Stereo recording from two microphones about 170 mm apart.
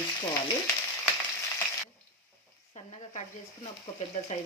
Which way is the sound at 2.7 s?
40° left (ahead or behind).